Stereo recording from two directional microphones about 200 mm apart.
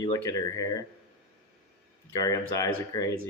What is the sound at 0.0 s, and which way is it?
Speech, 20° left (ahead or behind).